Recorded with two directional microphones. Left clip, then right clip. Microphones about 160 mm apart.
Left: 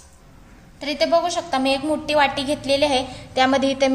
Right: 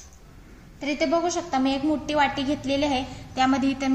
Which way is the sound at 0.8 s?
60° left (ahead or behind).